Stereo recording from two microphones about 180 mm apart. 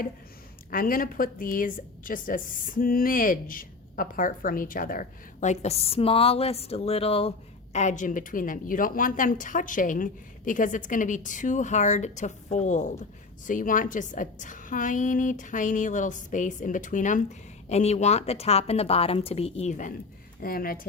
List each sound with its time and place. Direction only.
0.7 s a woman's voice: 50° left (ahead or behind)
20.4 s a woman's voice: 55° left (ahead or behind)